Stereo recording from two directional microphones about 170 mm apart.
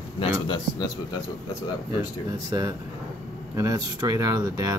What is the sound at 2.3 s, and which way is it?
Speech, 20° right (ahead or behind).